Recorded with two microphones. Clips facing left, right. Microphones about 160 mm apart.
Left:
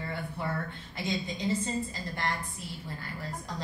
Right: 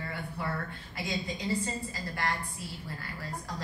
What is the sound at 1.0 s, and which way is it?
Speech, 20° left (ahead or behind).